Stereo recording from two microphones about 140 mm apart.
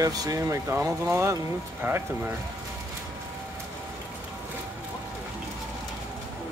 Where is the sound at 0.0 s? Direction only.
25° right (ahead or behind).